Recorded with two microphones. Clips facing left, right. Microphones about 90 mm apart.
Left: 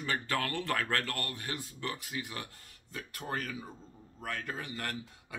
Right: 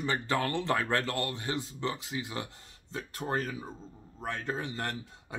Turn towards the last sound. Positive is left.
turn(degrees=-25)  # may be behind; listen again after turning